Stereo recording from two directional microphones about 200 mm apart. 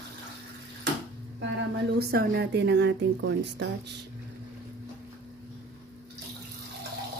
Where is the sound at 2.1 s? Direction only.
55° right (ahead or behind).